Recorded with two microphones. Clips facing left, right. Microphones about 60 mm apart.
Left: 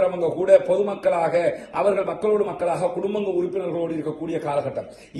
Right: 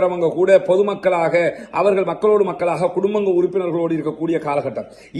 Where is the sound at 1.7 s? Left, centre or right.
Right.